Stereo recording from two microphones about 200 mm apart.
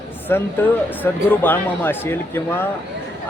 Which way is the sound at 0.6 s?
10° left (ahead or behind).